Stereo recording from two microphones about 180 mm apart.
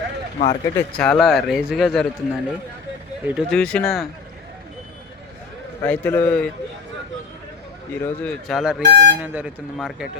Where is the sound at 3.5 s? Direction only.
5° left (ahead or behind).